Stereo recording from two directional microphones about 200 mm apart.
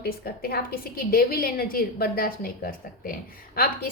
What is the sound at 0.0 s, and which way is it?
A woman's voice, 50° left (ahead or behind).